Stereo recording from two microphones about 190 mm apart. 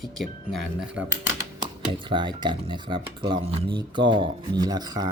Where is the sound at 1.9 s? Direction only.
25° right (ahead or behind).